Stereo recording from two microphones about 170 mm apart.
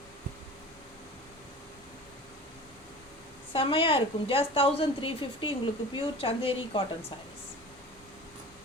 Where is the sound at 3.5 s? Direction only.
30° left (ahead or behind).